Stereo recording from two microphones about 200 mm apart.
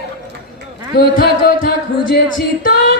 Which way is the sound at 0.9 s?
50° left (ahead or behind).